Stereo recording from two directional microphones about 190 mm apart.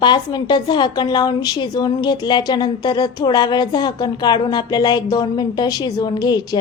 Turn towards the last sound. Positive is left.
turn(degrees=20)  # may be behind; listen again after turning